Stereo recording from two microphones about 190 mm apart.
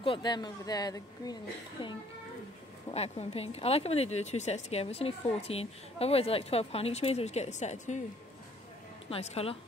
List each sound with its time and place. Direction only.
0.0 s a woman's voice: 25° left (ahead or behind)
9.1 s speech: 30° left (ahead or behind)